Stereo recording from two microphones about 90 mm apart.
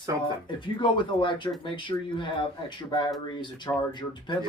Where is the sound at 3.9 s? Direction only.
60° left (ahead or behind).